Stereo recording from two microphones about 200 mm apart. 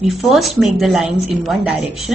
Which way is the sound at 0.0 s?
Centre (ahead or behind).